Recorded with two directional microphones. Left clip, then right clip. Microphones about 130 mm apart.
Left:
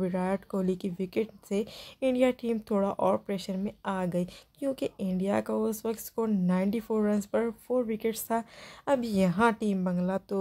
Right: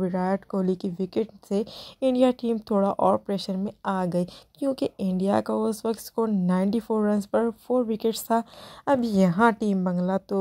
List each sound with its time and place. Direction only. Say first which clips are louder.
0.0 s speech: right 4 dB; 25° right (ahead or behind)
6.2 s speech: right 3 dB; 30° right (ahead or behind)